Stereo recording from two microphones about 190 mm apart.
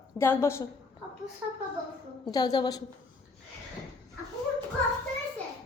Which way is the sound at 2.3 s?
20° left (ahead or behind).